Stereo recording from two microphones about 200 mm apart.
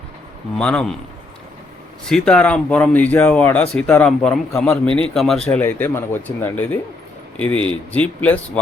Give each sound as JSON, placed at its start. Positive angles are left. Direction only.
{"t": 0.5, "sound": "speech", "side_deg": 5}
{"t": 2.0, "sound": "speech", "side_deg": 5}
{"t": 4.9, "sound": "a man's voice", "side_deg": -25}
{"t": 5.1, "sound": "speech", "side_deg": 0}